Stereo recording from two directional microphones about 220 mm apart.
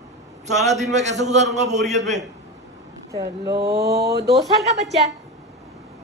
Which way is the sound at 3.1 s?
15° right (ahead or behind).